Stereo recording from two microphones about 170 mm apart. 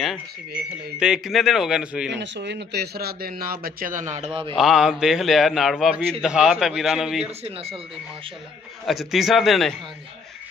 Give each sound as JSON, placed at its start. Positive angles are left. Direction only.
{"t": 0.9, "sound": "a man's voice", "side_deg": -5}
{"t": 2.1, "sound": "speech", "side_deg": -90}
{"t": 4.1, "sound": "speech", "side_deg": -40}
{"t": 4.6, "sound": "a man's voice", "side_deg": -5}
{"t": 7.2, "sound": "speech", "side_deg": -35}
{"t": 8.8, "sound": "a man's voice", "side_deg": 0}